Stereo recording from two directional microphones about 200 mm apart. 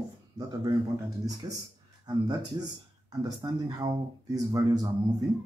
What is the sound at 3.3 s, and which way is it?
Speech, 20° right (ahead or behind).